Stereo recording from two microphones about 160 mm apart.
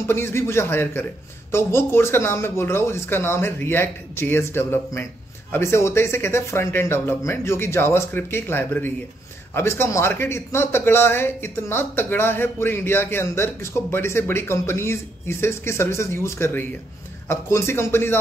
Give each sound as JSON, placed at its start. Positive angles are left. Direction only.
{"t": 0.0, "sound": "a man's voice", "side_deg": 15}